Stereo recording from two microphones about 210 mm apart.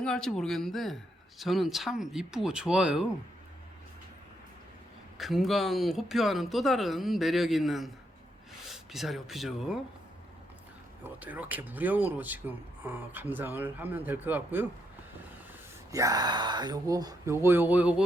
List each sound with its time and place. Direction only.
0.0 s speech: 5° left (ahead or behind)
5.1 s speech: centre (ahead or behind)
11.0 s speech: 5° right (ahead or behind)
15.9 s speech: 15° right (ahead or behind)